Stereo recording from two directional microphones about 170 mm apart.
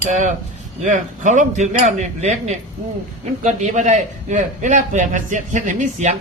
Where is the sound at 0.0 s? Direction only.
50° right (ahead or behind).